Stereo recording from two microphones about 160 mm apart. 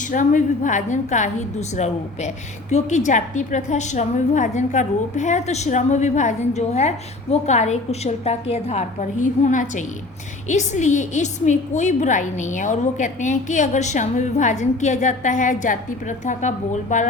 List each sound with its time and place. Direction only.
0.1 s a woman's voice: 55° left (ahead or behind)